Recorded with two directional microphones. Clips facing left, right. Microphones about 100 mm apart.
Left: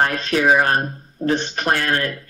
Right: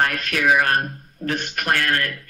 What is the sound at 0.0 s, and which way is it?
Speech, 25° left (ahead or behind).